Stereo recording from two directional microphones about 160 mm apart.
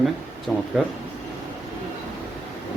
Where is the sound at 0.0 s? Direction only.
Centre (ahead or behind).